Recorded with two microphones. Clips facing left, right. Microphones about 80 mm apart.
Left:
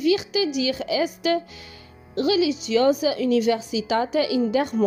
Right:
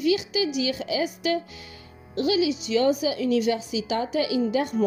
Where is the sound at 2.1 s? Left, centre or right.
Left.